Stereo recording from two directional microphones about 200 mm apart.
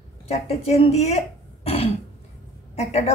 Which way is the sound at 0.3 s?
30° left (ahead or behind).